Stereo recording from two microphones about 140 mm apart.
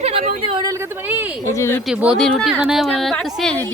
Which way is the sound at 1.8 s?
5° right (ahead or behind).